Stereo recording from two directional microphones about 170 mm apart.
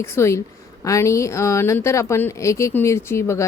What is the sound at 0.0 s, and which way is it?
Speech, 15° left (ahead or behind).